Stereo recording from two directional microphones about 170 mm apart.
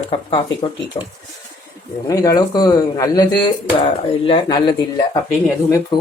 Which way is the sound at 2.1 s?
20° left (ahead or behind).